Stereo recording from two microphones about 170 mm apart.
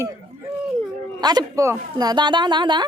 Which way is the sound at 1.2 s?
25° right (ahead or behind).